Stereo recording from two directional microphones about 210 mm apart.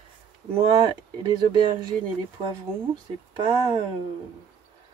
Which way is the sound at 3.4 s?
20° right (ahead or behind).